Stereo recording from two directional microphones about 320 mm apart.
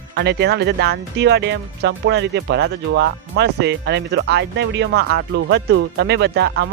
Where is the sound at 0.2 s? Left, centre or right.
Right.